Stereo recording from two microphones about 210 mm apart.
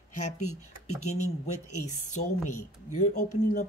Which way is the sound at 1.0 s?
35° left (ahead or behind).